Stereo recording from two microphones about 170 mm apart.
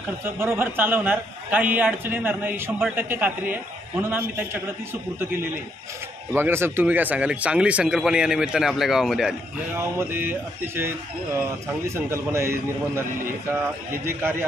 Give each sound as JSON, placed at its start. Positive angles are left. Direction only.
{"t": 0.2, "sound": "a man's voice", "side_deg": -15}
{"t": 6.3, "sound": "a man's voice", "side_deg": -15}